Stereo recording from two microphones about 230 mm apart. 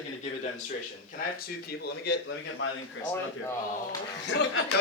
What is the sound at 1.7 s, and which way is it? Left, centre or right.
Speech, left.